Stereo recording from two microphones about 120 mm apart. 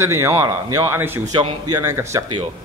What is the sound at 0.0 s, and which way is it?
A man's voice, 20° right (ahead or behind).